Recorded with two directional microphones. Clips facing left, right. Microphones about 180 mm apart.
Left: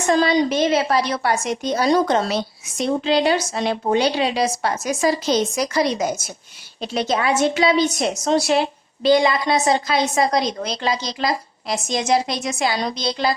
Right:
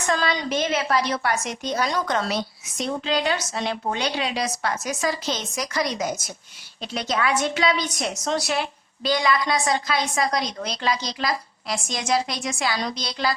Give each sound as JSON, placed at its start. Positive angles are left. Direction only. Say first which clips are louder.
{"t": 0.0, "sound": "a woman's voice", "louder": "left 7 dB", "side_deg": 25}